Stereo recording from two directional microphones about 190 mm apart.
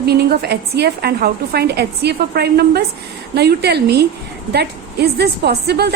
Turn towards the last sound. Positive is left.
turn(degrees=-60)  # may be behind; listen again after turning